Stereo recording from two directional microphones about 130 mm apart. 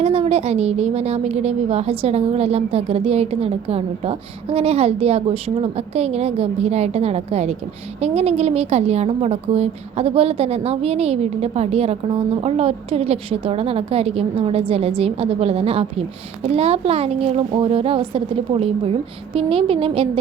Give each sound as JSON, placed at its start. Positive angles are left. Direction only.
{"t": 0.0, "sound": "a woman's voice", "side_deg": -50}